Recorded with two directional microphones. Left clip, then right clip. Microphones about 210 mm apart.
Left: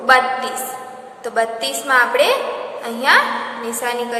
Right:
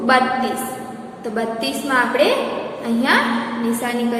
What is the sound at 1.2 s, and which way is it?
A woman's voice, 25° left (ahead or behind).